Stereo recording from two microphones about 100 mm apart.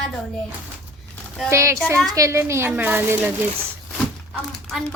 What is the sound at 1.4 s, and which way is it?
Speech, 30° right (ahead or behind).